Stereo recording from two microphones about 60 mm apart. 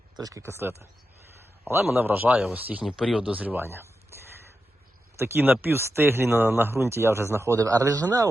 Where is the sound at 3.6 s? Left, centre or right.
Right.